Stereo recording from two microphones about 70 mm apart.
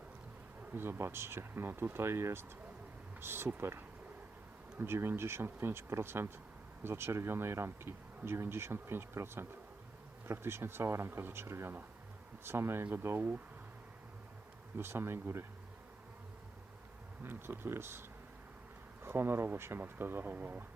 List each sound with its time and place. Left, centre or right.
0.7 s speech: right
14.8 s speech: right
17.2 s speech: right
19.0 s speech: right